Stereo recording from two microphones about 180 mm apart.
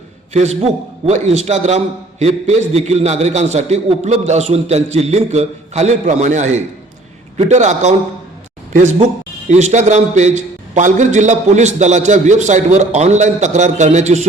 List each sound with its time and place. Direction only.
0.3 s a man's voice: 35° right (ahead or behind)